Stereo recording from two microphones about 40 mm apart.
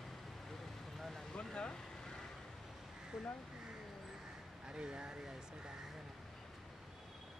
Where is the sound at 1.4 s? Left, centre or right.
Left.